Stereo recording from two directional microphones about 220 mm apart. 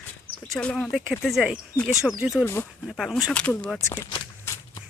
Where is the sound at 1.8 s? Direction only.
15° left (ahead or behind).